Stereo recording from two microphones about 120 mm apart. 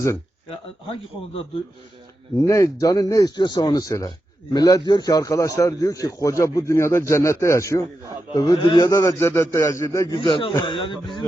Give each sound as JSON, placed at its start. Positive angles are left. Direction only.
{"t": 2.5, "sound": "a man's voice", "side_deg": 30}
{"t": 8.3, "sound": "speech", "side_deg": 40}
{"t": 8.9, "sound": "a man's voice", "side_deg": 25}
{"t": 10.1, "sound": "speech", "side_deg": 45}